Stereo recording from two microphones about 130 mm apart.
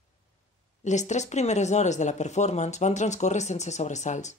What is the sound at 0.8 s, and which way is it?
Speech, 65° left (ahead or behind).